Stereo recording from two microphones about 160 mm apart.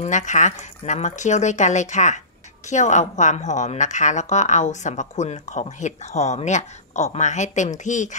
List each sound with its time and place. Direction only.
0.0 s a woman's voice: 50° left (ahead or behind)